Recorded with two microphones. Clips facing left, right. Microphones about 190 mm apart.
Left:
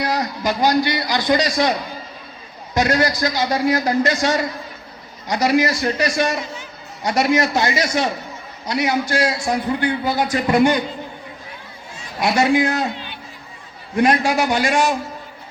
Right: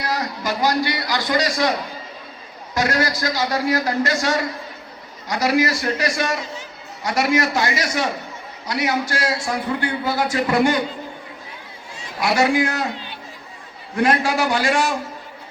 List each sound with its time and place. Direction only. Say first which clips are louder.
0.0 s a man's voice: left 3 dB; 15° left (ahead or behind)
2.7 s a man's voice: left 3 dB; 20° left (ahead or behind)
12.2 s a man's voice: left 2 dB; 20° left (ahead or behind)
13.9 s a man's voice: left 2 dB; 15° left (ahead or behind)